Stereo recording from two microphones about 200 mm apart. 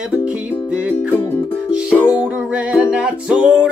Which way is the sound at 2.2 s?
5° right (ahead or behind).